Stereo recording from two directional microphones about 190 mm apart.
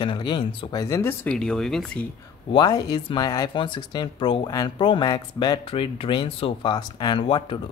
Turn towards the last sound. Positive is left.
turn(degrees=25)  # may be behind; listen again after turning